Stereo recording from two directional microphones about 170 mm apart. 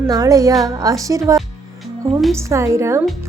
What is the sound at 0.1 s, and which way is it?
A woman's voice, 20° right (ahead or behind).